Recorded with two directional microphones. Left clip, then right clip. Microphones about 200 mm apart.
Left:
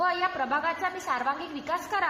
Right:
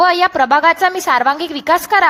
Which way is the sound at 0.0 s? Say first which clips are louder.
Right 15 dB; 60° right (ahead or behind).